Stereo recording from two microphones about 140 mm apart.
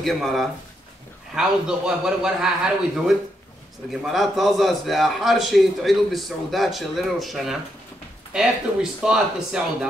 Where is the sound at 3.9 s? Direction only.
Centre (ahead or behind).